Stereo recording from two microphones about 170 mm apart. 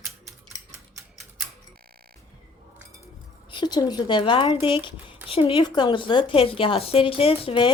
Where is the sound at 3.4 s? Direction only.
25° left (ahead or behind).